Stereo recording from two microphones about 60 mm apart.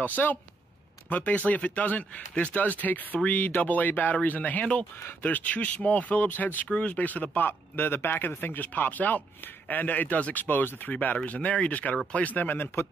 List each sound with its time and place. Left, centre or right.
0.0 s speech: left